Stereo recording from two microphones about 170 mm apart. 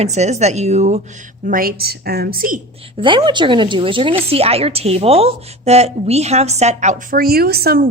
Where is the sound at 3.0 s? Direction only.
25° right (ahead or behind).